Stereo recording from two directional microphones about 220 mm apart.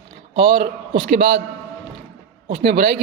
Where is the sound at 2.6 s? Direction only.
50° right (ahead or behind).